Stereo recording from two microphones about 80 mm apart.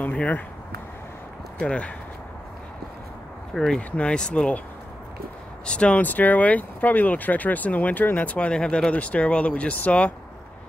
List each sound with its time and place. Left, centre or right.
0.0 s a sound: centre
1.6 s speech: centre
3.5 s speech: centre
5.7 s speech: centre